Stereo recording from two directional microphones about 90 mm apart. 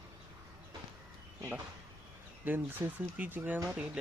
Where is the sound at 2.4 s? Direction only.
20° right (ahead or behind).